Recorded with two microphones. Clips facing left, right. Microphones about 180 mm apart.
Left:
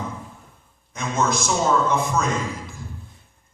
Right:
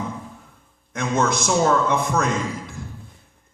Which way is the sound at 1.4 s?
60° right (ahead or behind).